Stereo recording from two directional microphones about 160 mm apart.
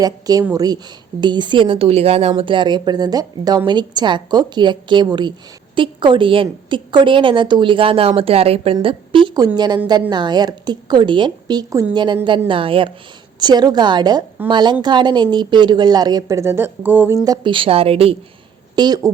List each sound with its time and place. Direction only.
0.0 s a woman's voice: 25° right (ahead or behind)
17.2 s a woman's voice: 30° right (ahead or behind)
18.8 s a woman's voice: 25° right (ahead or behind)